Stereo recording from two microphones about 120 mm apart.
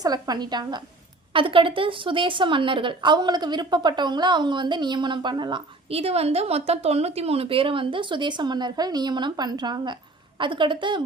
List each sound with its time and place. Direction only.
0.0 s speech: 35° right (ahead or behind)
1.3 s speech: 45° right (ahead or behind)
6.0 s a woman's voice: 60° right (ahead or behind); by 11.0 s 40° right (ahead or behind)